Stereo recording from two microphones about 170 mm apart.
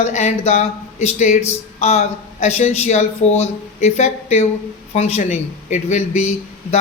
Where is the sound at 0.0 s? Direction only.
45° left (ahead or behind).